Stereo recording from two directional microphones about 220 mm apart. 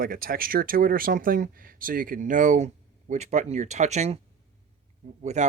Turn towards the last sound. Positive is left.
turn(degrees=-30)  # may be behind; listen again after turning